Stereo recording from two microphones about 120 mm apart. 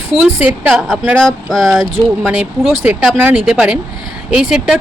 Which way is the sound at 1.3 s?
Centre (ahead or behind).